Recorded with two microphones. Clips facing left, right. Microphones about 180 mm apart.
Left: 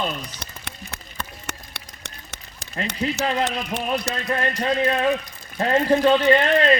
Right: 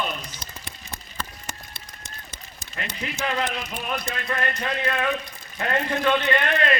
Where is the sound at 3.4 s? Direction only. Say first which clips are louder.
Left 4 dB; 70° left (ahead or behind).